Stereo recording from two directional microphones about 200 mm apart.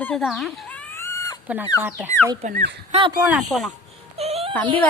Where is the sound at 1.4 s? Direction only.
10° right (ahead or behind).